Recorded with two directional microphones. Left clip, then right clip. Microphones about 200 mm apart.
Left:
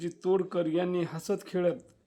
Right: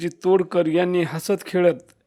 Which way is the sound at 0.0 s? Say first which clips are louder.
Right 9 dB; 30° right (ahead or behind).